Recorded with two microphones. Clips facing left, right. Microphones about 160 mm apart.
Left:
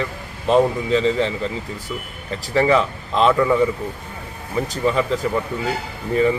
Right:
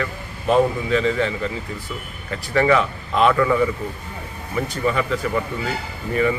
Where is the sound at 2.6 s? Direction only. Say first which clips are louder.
Left 1 dB; 25° left (ahead or behind).